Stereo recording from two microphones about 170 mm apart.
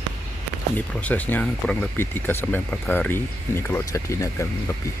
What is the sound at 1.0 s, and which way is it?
Speech, 10° left (ahead or behind).